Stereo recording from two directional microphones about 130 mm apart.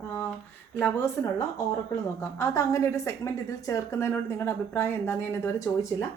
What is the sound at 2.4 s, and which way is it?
A woman's voice, 25° left (ahead or behind).